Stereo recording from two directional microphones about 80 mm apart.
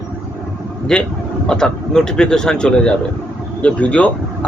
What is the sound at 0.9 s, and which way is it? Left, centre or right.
Speech, centre.